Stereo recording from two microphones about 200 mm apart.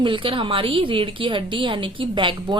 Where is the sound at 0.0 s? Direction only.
25° right (ahead or behind).